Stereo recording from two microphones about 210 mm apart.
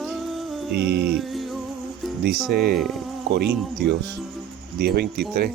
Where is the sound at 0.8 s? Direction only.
50° right (ahead or behind).